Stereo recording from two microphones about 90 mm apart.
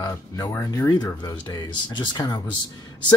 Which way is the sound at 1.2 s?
50° left (ahead or behind).